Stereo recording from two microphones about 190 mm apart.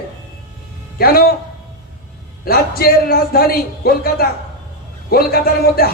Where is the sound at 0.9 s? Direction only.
55° left (ahead or behind).